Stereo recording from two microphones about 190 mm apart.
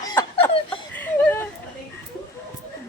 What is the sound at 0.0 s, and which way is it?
Chuckle, 20° left (ahead or behind).